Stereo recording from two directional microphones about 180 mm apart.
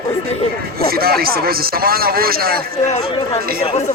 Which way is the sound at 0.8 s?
55° right (ahead or behind).